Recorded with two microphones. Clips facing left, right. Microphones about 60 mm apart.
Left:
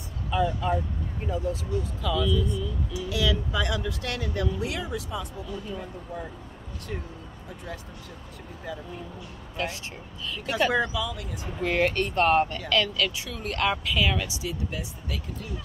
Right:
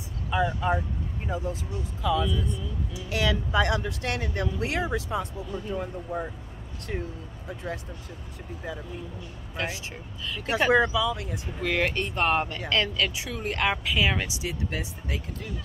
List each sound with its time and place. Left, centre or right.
0.3 s speech: centre
3.1 s speech: right
10.4 s speech: right
11.8 s speech: centre
12.5 s speech: right